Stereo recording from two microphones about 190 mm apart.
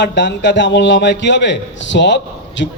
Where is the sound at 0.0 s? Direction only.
65° left (ahead or behind).